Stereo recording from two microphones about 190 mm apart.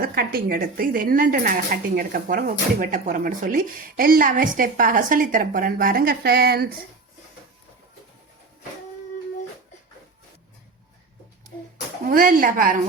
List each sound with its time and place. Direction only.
0.0 s a woman's voice: 55° right (ahead or behind)
12.0 s a woman's voice: 45° right (ahead or behind)